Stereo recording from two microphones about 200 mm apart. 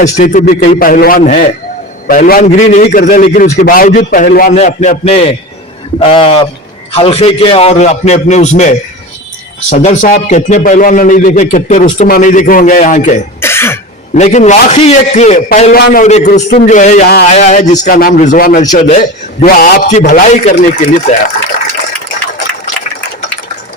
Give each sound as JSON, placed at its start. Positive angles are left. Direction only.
{"t": 0.0, "sound": "a man's voice", "side_deg": 40}
{"t": 2.4, "sound": "a man's voice", "side_deg": 35}
{"t": 4.5, "sound": "a man's voice", "side_deg": 35}
{"t": 13.4, "sound": "cough", "side_deg": 10}
{"t": 14.2, "sound": "a man's voice", "side_deg": 35}
{"t": 17.8, "sound": "a man's voice", "side_deg": 45}
{"t": 19.5, "sound": "a man's voice", "side_deg": 45}